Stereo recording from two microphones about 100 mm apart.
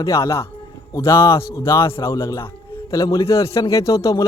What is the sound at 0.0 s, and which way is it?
A man's voice, 30° left (ahead or behind).